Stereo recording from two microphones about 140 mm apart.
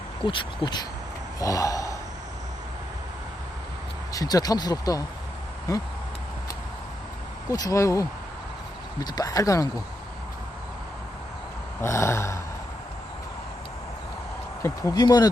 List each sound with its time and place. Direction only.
0.3 s speech: 35° left (ahead or behind)
1.4 s gasp: 25° left (ahead or behind)
4.1 s speech: 25° left (ahead or behind)
7.5 s speech: 25° left (ahead or behind)
11.8 s speech: 20° left (ahead or behind)
14.6 s speech: 20° left (ahead or behind)